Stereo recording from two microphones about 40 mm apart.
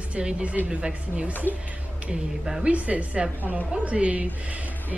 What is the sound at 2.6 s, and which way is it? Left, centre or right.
Speech, right.